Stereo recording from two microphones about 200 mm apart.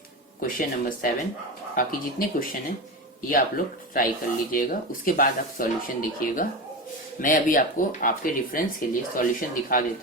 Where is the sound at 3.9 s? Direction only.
45° left (ahead or behind).